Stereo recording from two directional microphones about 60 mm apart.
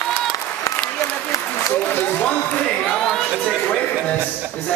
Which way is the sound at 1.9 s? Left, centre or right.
Left.